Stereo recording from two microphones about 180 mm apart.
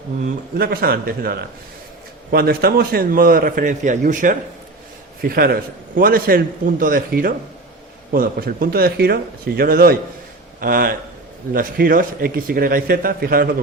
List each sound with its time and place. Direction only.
0.6 s a man's voice: 55° right (ahead or behind)